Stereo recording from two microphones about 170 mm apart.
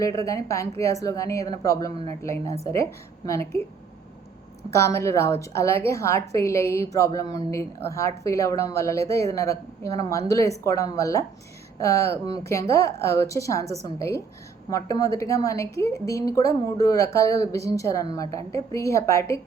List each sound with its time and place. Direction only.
0.0 s a woman's voice: 20° left (ahead or behind)
4.7 s a woman's voice: 15° left (ahead or behind)